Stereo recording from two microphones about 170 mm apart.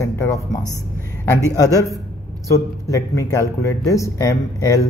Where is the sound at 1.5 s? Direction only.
20° left (ahead or behind).